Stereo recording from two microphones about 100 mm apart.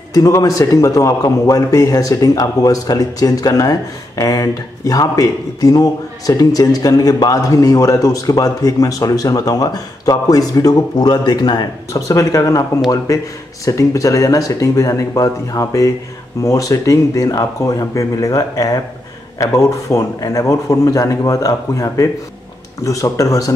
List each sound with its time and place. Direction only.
0.1 s speech: 35° left (ahead or behind)
11.9 s speech: 35° left (ahead or behind)